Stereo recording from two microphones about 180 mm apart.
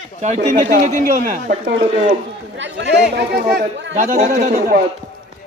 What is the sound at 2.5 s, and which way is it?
Speech, 85° right.